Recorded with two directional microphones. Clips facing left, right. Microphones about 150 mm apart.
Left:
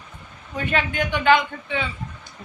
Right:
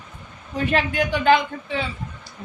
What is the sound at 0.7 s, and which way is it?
Speech, 35° right (ahead or behind).